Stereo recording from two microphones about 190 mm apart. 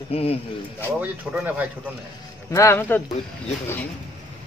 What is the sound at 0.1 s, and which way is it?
Speech, 30° left (ahead or behind).